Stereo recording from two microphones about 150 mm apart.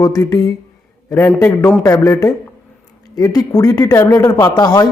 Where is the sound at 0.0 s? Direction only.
25° left (ahead or behind).